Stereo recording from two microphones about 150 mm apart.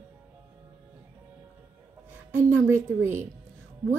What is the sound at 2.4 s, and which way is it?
Speech, 15° right (ahead or behind).